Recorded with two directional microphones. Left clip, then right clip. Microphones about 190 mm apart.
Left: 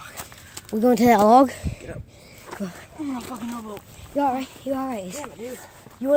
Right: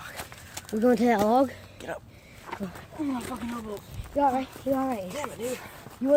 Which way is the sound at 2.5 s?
25° left (ahead or behind).